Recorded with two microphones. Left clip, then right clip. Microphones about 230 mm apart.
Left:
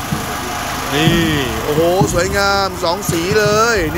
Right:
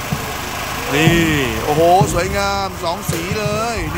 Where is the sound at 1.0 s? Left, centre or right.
Centre.